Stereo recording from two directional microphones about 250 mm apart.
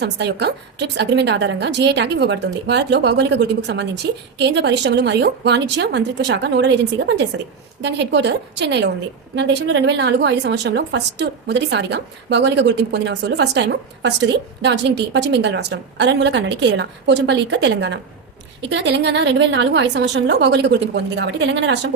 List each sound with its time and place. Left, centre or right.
0.0 s a woman's voice: right